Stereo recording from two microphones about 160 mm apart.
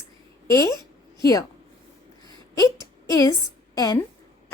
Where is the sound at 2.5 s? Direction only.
20° left (ahead or behind).